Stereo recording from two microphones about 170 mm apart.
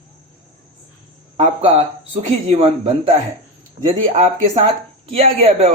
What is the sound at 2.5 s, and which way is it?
Speech, 35° right (ahead or behind).